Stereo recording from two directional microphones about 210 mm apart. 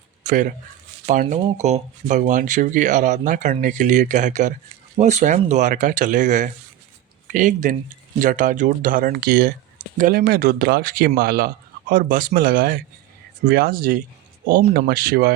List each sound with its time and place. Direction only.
0.2 s speech: 35° right (ahead or behind)